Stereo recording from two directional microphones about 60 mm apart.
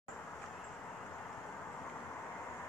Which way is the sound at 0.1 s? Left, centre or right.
Left.